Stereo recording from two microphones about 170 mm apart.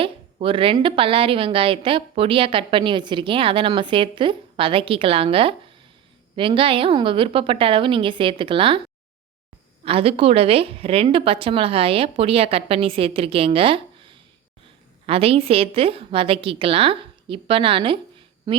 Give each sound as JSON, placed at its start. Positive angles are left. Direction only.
{"t": 0.0, "sound": "a woman's voice", "side_deg": -30}
{"t": 9.8, "sound": "a woman's voice", "side_deg": -35}